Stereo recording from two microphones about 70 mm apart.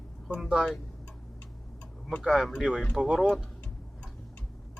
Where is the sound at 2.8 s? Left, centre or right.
Centre.